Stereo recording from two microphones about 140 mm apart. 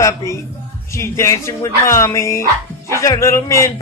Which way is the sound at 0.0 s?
20° left (ahead or behind).